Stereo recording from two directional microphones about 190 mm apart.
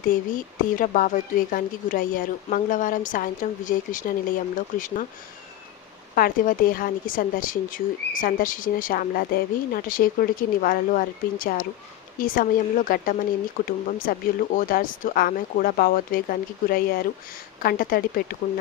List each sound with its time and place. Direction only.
0.3 s speech: 45° left (ahead or behind)
6.1 s speech: 50° left (ahead or behind)